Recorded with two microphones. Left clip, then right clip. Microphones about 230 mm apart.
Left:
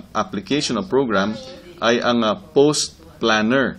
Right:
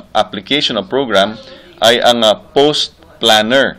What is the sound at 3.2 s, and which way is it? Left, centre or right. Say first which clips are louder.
Speech: right 8 dB; right.